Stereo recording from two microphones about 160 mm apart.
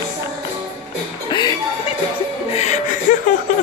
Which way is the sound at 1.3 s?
25° left (ahead or behind).